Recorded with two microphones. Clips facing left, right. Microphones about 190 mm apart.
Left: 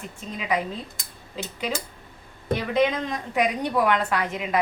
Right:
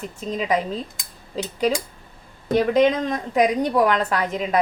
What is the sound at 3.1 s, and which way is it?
A woman's voice, 40° right (ahead or behind).